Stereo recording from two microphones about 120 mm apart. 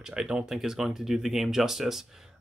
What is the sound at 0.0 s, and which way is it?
Speech, 5° right (ahead or behind).